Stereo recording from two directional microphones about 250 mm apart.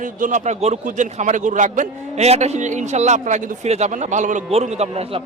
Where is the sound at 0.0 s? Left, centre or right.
Right.